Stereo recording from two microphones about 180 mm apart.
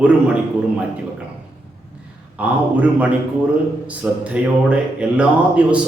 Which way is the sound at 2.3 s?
10° right (ahead or behind).